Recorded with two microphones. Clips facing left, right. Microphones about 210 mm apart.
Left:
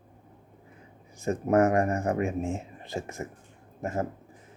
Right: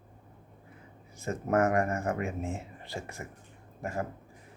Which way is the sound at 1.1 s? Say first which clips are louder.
Left 5 dB; 15° left (ahead or behind).